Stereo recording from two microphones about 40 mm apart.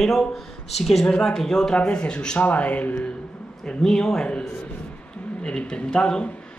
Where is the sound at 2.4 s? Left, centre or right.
Left.